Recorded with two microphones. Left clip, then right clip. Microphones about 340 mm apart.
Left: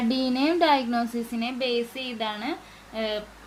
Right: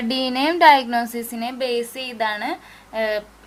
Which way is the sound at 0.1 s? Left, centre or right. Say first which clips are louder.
Right 6 dB; right.